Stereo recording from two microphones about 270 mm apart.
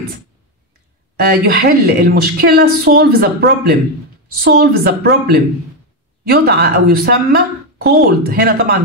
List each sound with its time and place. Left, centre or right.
1.1 s a woman's voice: right